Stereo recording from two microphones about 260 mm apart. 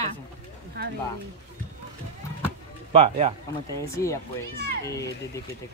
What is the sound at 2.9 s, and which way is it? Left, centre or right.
Speech, right.